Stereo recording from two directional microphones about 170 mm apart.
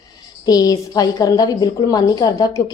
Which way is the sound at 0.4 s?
20° left (ahead or behind).